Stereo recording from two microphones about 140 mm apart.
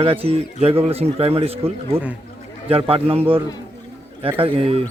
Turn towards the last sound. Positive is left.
turn(degrees=-45)  # may be behind; listen again after turning